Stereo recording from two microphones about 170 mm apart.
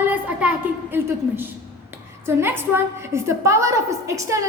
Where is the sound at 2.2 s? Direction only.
15° right (ahead or behind).